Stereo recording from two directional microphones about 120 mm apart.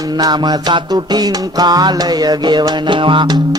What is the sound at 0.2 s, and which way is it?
Music, 35° right (ahead or behind).